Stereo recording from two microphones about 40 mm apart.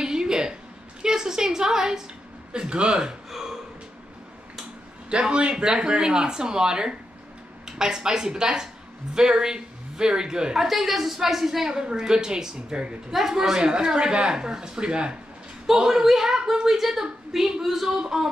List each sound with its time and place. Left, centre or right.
0.0 s a sound: centre
1.0 s a woman's voice: centre
3.3 s gasp: centre
5.1 s a woman's voice: right; by 11.7 s centre
11.7 s speech: centre
13.1 s a woman's voice: centre
13.4 s speech: centre
15.6 s a woman's voice: centre